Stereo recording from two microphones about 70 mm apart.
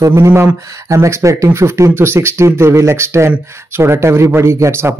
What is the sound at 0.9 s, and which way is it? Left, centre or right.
Speech, right.